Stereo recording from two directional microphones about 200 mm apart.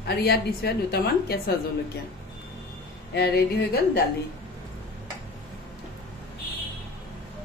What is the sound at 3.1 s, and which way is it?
Speech, 55° left (ahead or behind).